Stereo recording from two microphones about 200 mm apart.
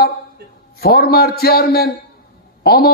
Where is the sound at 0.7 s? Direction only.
50° left (ahead or behind).